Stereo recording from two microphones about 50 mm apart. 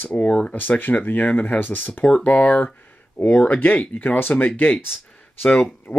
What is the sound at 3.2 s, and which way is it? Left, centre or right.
Speech, left.